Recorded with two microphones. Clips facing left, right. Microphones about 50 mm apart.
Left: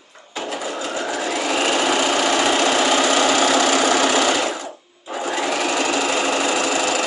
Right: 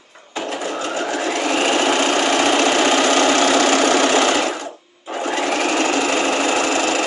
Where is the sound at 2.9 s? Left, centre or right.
Right.